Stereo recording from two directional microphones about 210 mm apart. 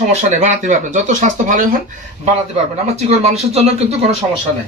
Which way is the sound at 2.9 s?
30° right (ahead or behind).